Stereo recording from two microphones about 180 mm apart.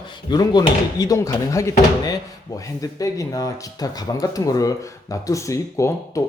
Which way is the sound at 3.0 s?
20° left (ahead or behind).